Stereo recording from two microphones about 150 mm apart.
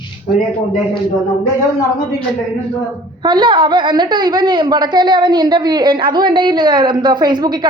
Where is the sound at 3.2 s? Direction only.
30° right (ahead or behind).